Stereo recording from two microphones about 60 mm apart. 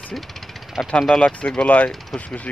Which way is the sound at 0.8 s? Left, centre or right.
Centre.